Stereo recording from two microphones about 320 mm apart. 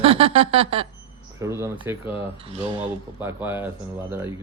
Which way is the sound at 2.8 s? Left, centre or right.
Centre.